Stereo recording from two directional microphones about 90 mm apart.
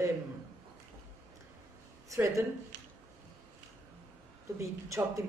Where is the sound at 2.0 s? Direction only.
35° right (ahead or behind).